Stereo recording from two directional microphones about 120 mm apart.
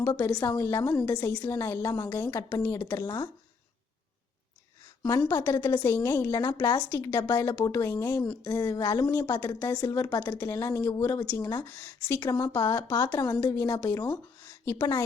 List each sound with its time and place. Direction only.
0.0 s a woman's voice: 30° left (ahead or behind)
5.3 s a woman's voice: 25° left (ahead or behind)